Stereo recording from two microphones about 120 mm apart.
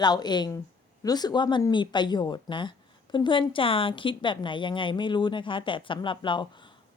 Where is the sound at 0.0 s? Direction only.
35° left (ahead or behind).